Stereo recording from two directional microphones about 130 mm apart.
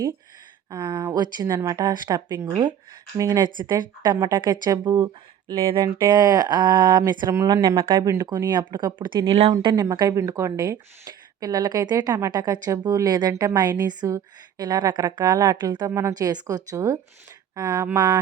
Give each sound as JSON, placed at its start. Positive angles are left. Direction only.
{"t": 0.7, "sound": "speech", "side_deg": -35}
{"t": 6.1, "sound": "speech", "side_deg": -30}
{"t": 9.8, "sound": "speech", "side_deg": -25}
{"t": 17.5, "sound": "a sound", "side_deg": -30}
{"t": 17.9, "sound": "speech", "side_deg": -30}